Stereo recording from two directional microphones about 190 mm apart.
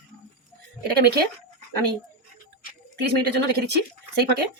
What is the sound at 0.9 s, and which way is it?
Speech, 60° right (ahead or behind).